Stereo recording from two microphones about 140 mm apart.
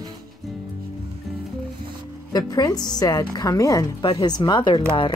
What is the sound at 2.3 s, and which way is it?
A woman's voice, 30° left (ahead or behind).